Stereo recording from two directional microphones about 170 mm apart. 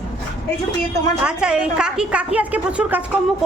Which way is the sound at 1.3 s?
5° right (ahead or behind).